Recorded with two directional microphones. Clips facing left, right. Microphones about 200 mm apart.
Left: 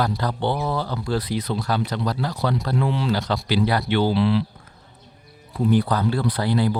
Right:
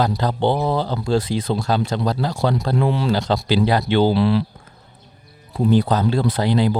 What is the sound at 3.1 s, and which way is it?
Speech, 25° right (ahead or behind).